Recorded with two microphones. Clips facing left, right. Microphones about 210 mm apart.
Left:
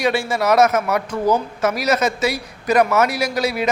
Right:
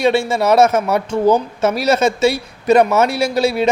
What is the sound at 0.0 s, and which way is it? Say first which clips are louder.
Speech: right 4 dB; 25° right (ahead or behind).